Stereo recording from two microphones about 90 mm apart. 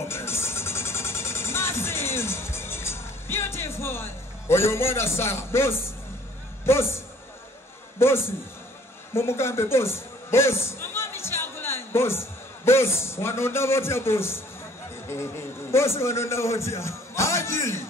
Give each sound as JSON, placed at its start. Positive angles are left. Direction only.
{"t": 0.1, "sound": "music", "side_deg": 30}
{"t": 6.6, "sound": "a man's voice", "side_deg": 30}
{"t": 8.0, "sound": "a man's voice", "side_deg": 30}